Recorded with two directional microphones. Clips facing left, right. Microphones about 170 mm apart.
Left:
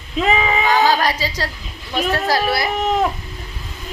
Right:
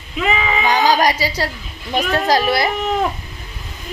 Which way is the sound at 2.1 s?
20° right (ahead or behind).